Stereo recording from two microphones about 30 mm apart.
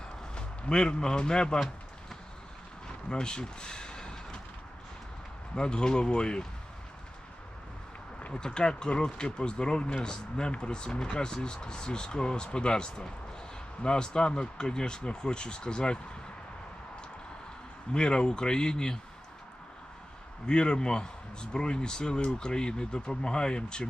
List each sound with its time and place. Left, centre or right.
0.3 s a man's voice: left
3.1 s a sound: left
5.5 s speech: left
8.3 s speech: left
17.9 s speech: left
20.5 s speech: left